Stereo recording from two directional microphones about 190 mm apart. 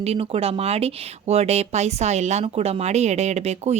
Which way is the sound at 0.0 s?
30° right (ahead or behind).